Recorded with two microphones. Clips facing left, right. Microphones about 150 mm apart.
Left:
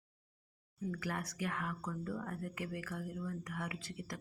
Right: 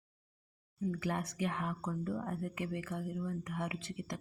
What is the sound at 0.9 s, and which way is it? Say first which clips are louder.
Speech: right 4 dB; 25° right (ahead or behind).